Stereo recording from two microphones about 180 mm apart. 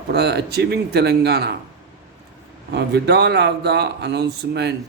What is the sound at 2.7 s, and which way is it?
Speech, 65° right (ahead or behind).